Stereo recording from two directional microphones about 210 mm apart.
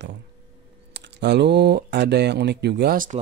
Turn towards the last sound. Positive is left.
turn(degrees=-45)  # may be behind; listen again after turning